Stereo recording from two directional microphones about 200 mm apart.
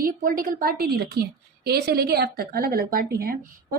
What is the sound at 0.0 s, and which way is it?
A woman's voice, 45° right (ahead or behind).